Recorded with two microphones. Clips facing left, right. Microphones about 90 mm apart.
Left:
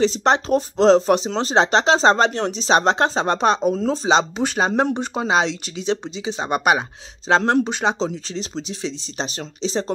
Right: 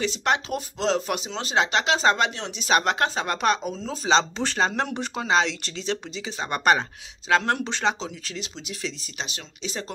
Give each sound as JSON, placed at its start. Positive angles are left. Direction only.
{"t": 0.0, "sound": "speech", "side_deg": 35}
{"t": 2.6, "sound": "speech", "side_deg": 25}
{"t": 4.1, "sound": "speech", "side_deg": 15}
{"t": 7.2, "sound": "speech", "side_deg": 25}
{"t": 7.6, "sound": "speech", "side_deg": 15}
{"t": 8.0, "sound": "speech", "side_deg": 35}